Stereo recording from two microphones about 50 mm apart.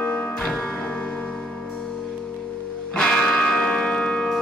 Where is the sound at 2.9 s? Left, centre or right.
Centre.